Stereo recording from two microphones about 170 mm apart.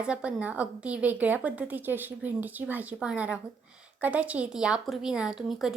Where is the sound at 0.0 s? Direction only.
5° right (ahead or behind).